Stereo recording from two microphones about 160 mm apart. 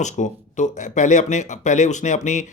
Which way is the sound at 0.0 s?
50° left (ahead or behind).